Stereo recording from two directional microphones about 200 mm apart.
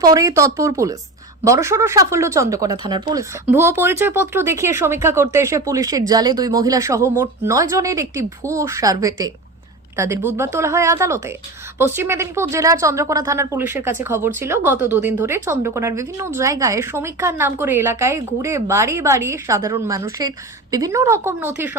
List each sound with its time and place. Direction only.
0.0 s a woman's voice: 20° right (ahead or behind)